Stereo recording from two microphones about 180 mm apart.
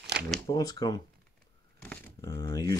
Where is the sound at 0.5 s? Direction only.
20° left (ahead or behind).